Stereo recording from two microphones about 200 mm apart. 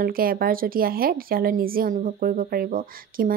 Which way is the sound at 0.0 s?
45° right (ahead or behind).